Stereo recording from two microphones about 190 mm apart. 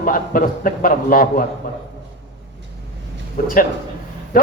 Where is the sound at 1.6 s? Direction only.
50° left (ahead or behind).